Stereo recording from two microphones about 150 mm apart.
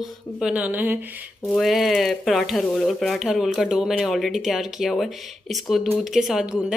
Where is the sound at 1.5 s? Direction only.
Centre (ahead or behind).